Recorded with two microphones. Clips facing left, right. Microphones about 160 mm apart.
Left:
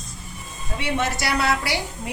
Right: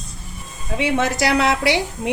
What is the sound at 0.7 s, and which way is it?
A woman's voice, 90° right.